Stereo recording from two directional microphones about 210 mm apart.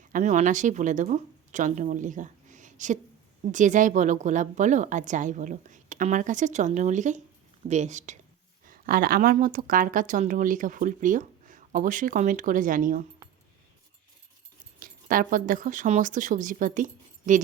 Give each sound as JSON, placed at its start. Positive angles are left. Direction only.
{"t": 0.1, "sound": "speech", "side_deg": -35}
{"t": 14.8, "sound": "speech", "side_deg": -45}